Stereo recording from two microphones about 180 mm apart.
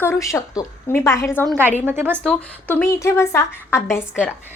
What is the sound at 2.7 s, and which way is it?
A woman's voice, 15° left (ahead or behind).